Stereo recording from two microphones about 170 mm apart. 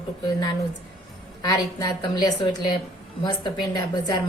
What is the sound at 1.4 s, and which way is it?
A woman's voice, 25° left (ahead or behind).